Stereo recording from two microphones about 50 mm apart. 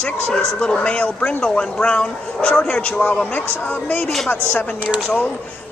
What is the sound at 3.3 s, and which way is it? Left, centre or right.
Speech, left.